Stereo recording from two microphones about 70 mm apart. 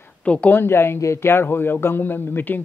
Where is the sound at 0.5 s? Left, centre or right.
Left.